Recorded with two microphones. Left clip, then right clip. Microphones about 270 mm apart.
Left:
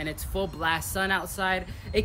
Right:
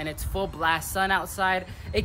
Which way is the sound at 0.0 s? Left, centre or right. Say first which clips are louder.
Right 1 dB; centre.